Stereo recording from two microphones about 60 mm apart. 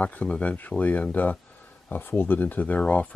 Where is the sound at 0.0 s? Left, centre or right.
Left.